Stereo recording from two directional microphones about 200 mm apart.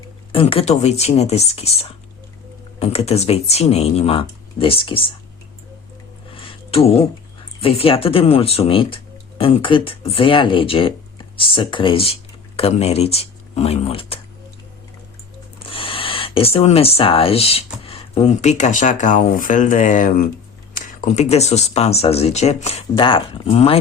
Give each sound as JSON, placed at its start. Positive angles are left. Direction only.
{"t": 0.3, "sound": "speech", "side_deg": 30}
{"t": 6.3, "sound": "a sound", "side_deg": 25}
{"t": 7.6, "sound": "speech", "side_deg": 30}
{"t": 15.6, "sound": "speech", "side_deg": 25}